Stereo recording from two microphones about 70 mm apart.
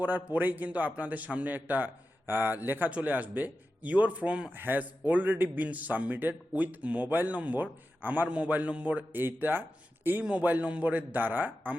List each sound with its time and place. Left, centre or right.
0.0 s a man's voice: right
4.5 s a man's voice: right
9.1 s a man's voice: right